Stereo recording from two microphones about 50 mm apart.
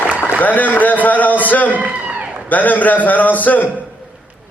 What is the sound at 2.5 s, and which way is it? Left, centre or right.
A man's voice, left.